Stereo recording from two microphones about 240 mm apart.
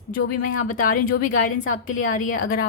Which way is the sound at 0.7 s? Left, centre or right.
Left.